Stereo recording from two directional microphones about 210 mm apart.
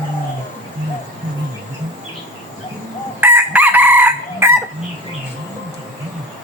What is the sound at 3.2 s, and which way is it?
Chicken, 10° right (ahead or behind).